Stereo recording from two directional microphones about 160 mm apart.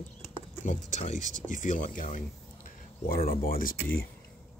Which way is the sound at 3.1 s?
65° left (ahead or behind).